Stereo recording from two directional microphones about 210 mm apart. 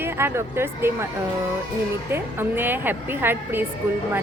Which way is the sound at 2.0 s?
10° right (ahead or behind).